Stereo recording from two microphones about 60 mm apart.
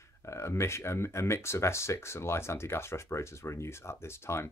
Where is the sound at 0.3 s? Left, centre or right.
Left.